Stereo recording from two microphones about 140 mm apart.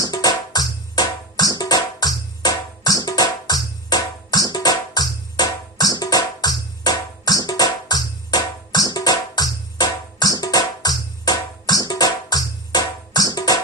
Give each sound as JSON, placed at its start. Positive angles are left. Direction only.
{"t": 0.0, "sound": "music", "side_deg": 25}